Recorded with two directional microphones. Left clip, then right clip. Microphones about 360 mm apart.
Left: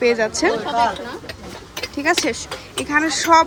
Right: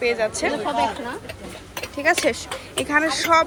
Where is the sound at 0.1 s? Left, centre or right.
Centre.